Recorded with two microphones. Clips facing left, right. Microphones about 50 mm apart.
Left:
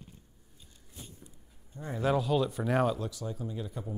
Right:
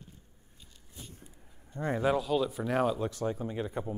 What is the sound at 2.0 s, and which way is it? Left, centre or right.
Speech, centre.